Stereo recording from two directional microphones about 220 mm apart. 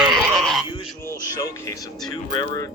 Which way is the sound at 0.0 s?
Centre (ahead or behind).